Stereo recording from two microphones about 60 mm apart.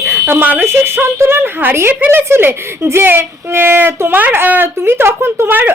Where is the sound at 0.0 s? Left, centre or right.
Right.